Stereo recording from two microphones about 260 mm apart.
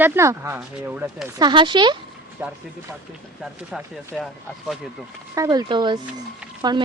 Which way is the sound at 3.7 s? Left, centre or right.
Centre.